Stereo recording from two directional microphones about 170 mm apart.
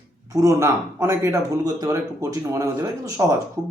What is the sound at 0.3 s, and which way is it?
A man's voice, 20° right (ahead or behind).